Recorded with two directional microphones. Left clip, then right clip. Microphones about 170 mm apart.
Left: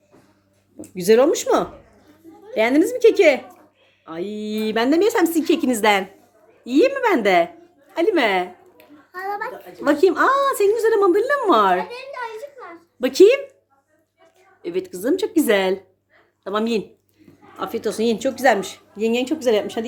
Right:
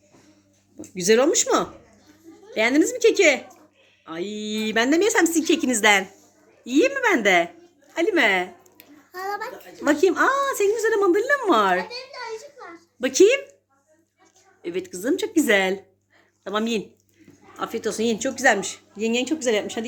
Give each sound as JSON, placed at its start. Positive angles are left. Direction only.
{"t": 0.8, "sound": "speech", "side_deg": 0}
{"t": 9.1, "sound": "a sound", "side_deg": -25}
{"t": 9.8, "sound": "speech", "side_deg": 0}
{"t": 13.0, "sound": "speech", "side_deg": 10}
{"t": 14.6, "sound": "speech", "side_deg": 0}